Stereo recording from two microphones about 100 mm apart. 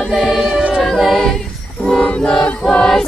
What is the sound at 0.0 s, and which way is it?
Choir, centre (ahead or behind).